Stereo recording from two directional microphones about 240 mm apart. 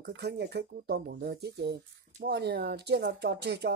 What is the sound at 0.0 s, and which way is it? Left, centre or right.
Speech, right.